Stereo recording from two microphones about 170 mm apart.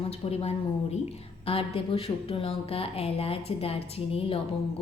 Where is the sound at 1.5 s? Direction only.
35° left (ahead or behind).